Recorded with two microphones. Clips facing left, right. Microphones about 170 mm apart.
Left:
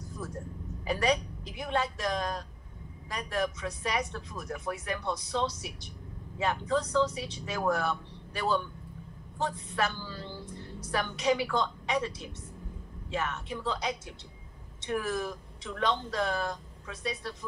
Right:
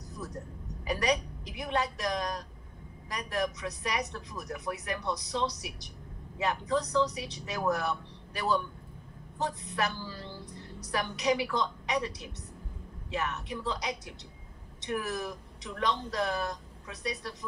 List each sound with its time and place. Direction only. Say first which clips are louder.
0.8 s speech: left 1 dB; 25° left (ahead or behind)
9.7 s speech: left 1 dB; 25° left (ahead or behind)